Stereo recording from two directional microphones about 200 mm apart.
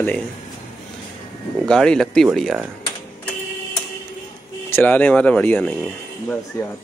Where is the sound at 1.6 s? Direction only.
5° left (ahead or behind).